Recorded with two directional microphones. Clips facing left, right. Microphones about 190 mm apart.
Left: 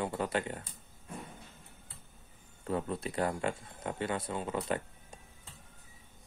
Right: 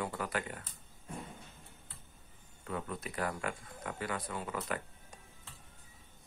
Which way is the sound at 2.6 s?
30° left (ahead or behind).